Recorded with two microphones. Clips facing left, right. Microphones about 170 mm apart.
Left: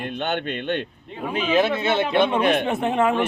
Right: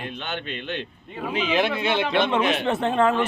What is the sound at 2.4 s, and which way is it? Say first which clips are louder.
Speech: left 3 dB; 55° left (ahead or behind).